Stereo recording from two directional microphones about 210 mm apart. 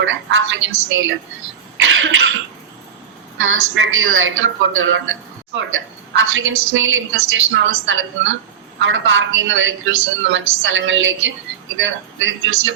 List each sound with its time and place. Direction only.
0.0 s a woman's voice: 65° right (ahead or behind)
1.8 s cough: 65° right (ahead or behind)
3.4 s a woman's voice: 70° right (ahead or behind)